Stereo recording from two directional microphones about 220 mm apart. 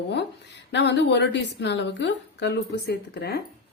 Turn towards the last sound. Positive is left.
turn(degrees=45)  # may be behind; listen again after turning